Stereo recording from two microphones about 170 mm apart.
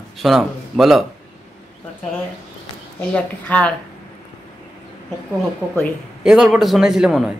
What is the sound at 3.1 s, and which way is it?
Speech, 10° left (ahead or behind).